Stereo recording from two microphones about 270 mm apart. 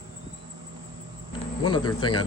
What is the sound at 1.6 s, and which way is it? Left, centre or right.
Speech, centre.